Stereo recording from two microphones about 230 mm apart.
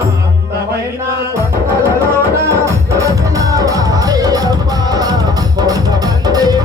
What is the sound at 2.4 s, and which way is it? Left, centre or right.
Music, centre.